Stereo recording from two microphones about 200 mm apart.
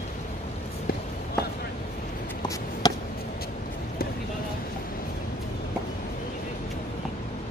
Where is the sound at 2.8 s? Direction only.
20° left (ahead or behind).